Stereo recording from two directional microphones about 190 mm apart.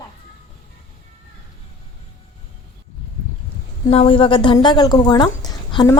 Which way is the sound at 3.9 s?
30° left (ahead or behind).